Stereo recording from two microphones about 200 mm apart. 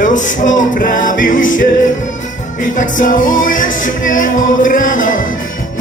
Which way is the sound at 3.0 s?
40° left (ahead or behind).